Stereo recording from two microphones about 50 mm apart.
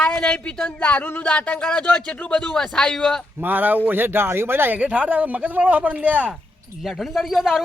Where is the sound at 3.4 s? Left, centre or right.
Right.